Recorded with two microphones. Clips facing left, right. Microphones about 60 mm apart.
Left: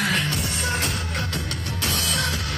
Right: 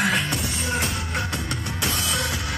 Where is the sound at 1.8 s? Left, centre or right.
Right.